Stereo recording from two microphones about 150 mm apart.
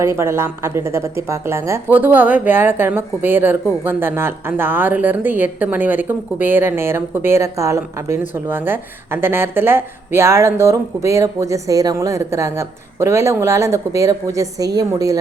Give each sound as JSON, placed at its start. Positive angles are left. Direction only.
{"t": 0.0, "sound": "a woman's voice", "side_deg": -20}